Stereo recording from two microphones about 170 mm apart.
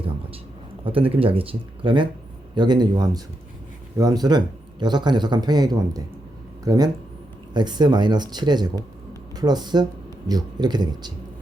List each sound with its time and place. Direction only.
0.9 s speech: 30° right (ahead or behind)